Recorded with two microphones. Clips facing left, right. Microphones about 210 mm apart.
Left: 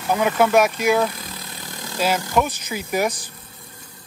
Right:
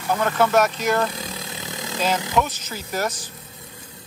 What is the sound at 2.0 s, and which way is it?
Speech, 10° left (ahead or behind).